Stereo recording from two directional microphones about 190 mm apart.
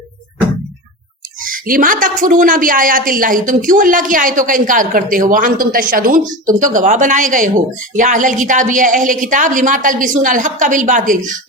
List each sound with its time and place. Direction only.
1.5 s a woman's voice: 45° right (ahead or behind)